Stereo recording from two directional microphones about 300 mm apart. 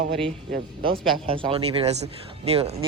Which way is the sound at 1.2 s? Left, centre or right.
Centre.